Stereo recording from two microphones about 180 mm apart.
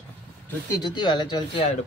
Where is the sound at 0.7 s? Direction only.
25° left (ahead or behind).